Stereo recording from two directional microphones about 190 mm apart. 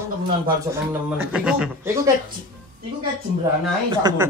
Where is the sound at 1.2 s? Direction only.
5° right (ahead or behind).